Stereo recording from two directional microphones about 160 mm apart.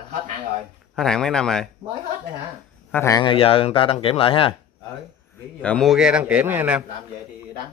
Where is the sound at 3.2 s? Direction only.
35° left (ahead or behind).